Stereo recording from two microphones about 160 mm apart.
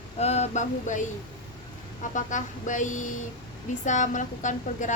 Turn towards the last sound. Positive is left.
turn(degrees=50)  # may be behind; listen again after turning